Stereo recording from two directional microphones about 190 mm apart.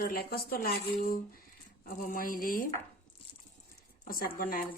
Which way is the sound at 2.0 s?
45° left (ahead or behind).